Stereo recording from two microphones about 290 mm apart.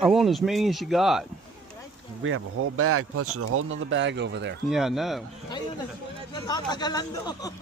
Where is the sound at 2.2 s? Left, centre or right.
Right.